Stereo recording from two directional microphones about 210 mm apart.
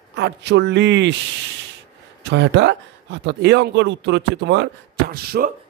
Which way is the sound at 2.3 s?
55° right (ahead or behind).